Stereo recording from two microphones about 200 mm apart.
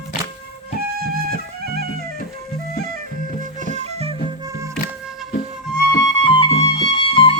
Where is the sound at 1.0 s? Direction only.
50° right (ahead or behind).